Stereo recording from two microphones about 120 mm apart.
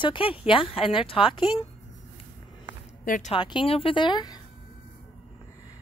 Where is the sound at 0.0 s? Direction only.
45° left (ahead or behind).